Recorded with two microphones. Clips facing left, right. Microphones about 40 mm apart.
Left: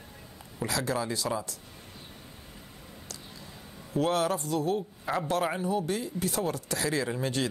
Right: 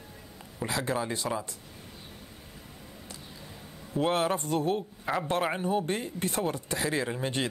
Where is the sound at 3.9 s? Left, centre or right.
Right.